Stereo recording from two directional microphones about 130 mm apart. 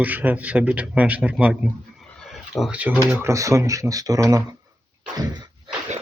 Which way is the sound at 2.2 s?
5° right (ahead or behind).